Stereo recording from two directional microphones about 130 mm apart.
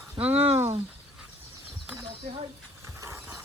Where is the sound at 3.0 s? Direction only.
25° right (ahead or behind).